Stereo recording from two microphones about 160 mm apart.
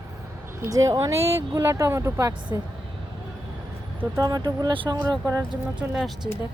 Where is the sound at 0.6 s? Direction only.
20° right (ahead or behind).